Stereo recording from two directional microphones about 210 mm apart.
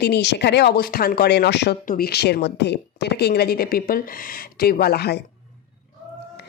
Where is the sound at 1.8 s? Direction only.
45° left (ahead or behind).